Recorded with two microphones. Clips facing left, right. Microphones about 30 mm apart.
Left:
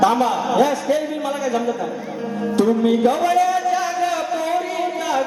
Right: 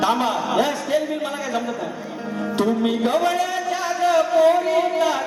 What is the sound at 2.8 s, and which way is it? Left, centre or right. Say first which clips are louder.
Speech: left 3 dB; right.